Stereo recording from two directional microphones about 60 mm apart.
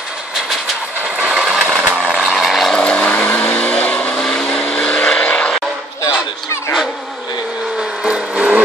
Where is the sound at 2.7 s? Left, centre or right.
Centre.